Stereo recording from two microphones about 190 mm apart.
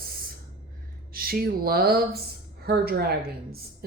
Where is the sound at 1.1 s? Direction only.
50° right (ahead or behind).